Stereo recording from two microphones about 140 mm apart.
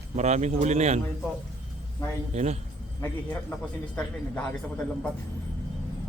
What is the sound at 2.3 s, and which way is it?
Speech, 55° right (ahead or behind).